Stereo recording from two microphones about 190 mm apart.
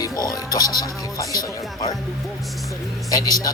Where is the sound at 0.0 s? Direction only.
20° left (ahead or behind).